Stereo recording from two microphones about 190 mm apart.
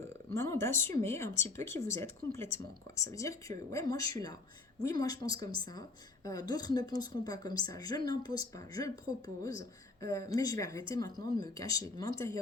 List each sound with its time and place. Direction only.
0.3 s a woman's voice: 15° left (ahead or behind)